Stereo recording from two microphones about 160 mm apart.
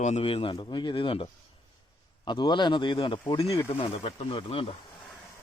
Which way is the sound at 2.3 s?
30° left (ahead or behind).